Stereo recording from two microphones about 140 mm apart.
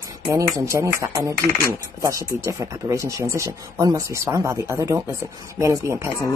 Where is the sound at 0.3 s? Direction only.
20° right (ahead or behind).